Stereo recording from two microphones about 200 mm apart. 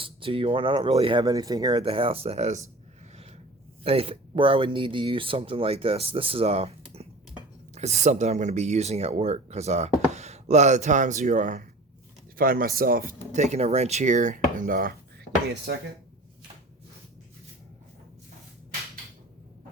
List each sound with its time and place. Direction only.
0.0 s speech: 25° right (ahead or behind)
3.8 s speech: 30° right (ahead or behind); by 14.9 s 45° right (ahead or behind)